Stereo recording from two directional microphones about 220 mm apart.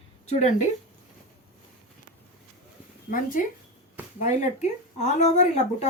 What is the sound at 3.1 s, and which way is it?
Speech, 40° left (ahead or behind).